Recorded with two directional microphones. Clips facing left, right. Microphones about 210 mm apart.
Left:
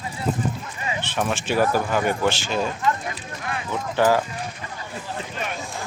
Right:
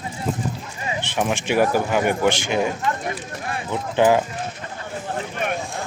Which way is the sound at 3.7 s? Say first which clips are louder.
Right 3 dB; 20° right (ahead or behind).